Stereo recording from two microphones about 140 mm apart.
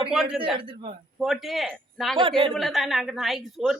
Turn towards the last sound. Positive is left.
turn(degrees=0)  # may be behind; listen again after turning